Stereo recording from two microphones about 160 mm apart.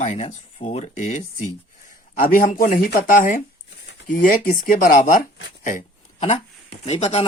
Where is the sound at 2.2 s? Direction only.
65° left (ahead or behind).